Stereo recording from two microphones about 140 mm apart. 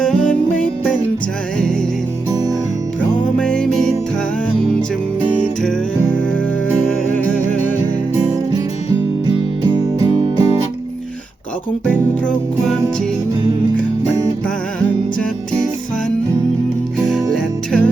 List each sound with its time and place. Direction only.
0.0 s music: 5° left (ahead or behind)
3.0 s music: 5° left (ahead or behind)
5.6 s music: 10° left (ahead or behind)
8.1 s music: 20° right (ahead or behind)
11.9 s music: 5° left (ahead or behind)
17.0 s music: 5° left (ahead or behind)